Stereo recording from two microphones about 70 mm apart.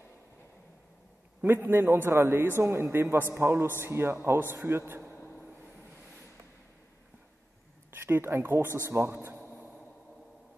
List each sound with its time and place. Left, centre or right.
1.4 s a man's voice: right
7.9 s a man's voice: right